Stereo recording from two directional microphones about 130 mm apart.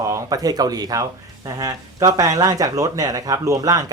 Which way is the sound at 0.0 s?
25° right (ahead or behind).